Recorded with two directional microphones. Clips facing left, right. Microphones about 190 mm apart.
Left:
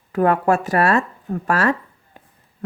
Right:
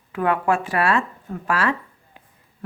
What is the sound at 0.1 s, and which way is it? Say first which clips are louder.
Speech: left 4 dB; 40° left (ahead or behind).